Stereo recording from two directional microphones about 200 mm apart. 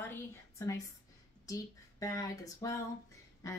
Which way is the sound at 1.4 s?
15° left (ahead or behind).